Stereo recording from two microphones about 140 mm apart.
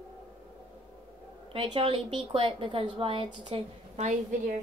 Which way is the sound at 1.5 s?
35° right (ahead or behind).